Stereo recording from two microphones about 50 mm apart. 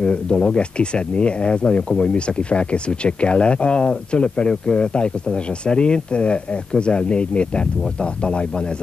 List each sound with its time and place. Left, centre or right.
0.0 s speech: centre